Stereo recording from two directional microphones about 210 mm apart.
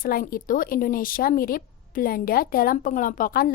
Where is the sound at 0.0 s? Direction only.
45° left (ahead or behind).